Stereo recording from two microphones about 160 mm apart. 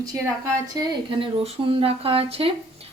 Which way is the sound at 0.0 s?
20° right (ahead or behind).